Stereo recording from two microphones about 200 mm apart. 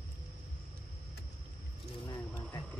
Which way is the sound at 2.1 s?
15° left (ahead or behind).